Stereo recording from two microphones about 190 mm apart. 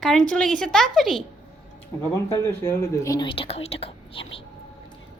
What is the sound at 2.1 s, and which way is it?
Speech, 15° left (ahead or behind).